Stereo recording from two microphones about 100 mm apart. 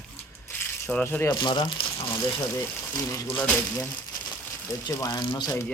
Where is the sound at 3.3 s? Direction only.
15° left (ahead or behind).